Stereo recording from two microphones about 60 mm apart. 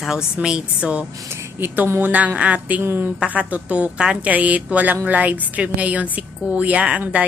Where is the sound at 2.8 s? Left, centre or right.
Right.